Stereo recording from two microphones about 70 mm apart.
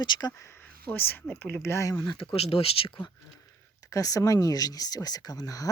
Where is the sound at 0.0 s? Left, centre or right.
Left.